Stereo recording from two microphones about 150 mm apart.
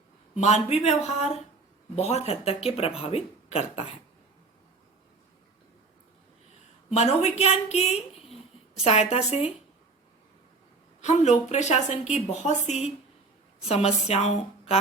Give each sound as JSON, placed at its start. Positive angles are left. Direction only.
{"t": 0.3, "sound": "a woman's voice", "side_deg": 50}
{"t": 6.9, "sound": "a woman's voice", "side_deg": 45}
{"t": 11.0, "sound": "a woman's voice", "side_deg": 50}